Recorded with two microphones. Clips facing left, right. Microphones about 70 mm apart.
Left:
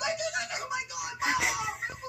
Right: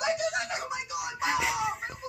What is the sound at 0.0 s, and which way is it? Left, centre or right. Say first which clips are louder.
Music: right 3 dB; right.